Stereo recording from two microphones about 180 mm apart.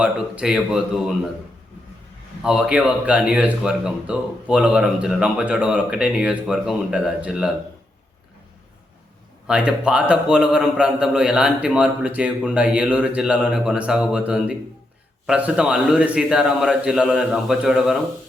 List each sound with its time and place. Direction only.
0.0 s speech: 5° right (ahead or behind)
2.4 s speech: 5° right (ahead or behind)
9.5 s speech: 5° right (ahead or behind)